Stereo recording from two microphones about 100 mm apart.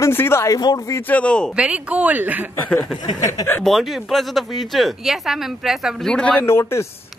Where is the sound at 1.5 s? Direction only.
10° right (ahead or behind).